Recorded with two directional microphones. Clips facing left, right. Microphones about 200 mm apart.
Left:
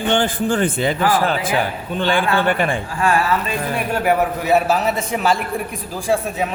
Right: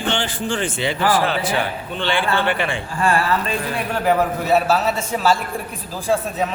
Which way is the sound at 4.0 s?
15° left (ahead or behind).